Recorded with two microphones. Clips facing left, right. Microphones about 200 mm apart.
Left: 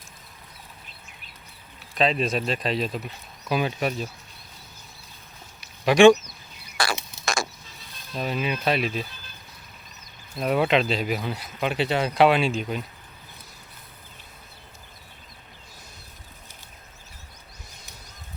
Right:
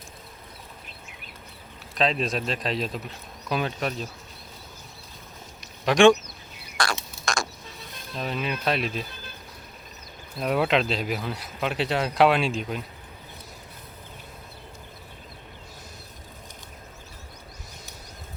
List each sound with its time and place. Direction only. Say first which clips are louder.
2.0 s speech: left 2 dB; centre (ahead or behind)
5.5 s a sound: left 3 dB; 5° left (ahead or behind)
6.8 s frog: left 1 dB; 5° left (ahead or behind)
8.1 s speech: left 2 dB; 5° left (ahead or behind)
10.3 s speech: left 2 dB; centre (ahead or behind)